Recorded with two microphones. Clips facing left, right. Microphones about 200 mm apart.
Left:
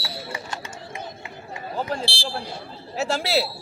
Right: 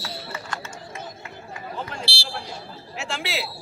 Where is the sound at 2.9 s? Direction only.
40° left (ahead or behind).